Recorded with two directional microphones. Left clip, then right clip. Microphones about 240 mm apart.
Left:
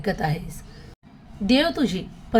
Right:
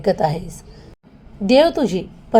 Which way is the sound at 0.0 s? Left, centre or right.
Centre.